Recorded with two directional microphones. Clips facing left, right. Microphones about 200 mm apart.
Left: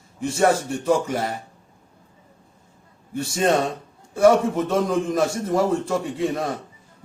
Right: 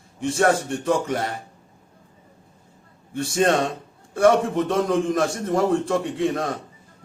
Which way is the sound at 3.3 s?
Centre (ahead or behind).